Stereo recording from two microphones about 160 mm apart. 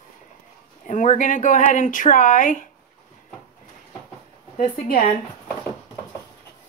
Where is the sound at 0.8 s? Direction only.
50° left (ahead or behind).